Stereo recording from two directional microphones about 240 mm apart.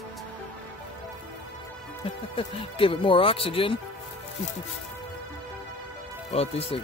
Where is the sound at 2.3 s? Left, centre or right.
Left.